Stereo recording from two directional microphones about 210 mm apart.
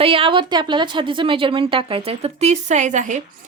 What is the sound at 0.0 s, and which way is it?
A woman's voice, 25° right (ahead or behind).